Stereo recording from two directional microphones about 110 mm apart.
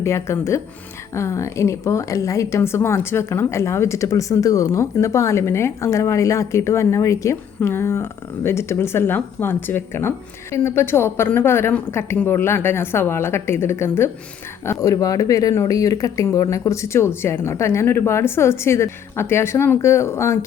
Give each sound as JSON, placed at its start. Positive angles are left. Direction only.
{"t": 0.0, "sound": "a woman's voice", "side_deg": 25}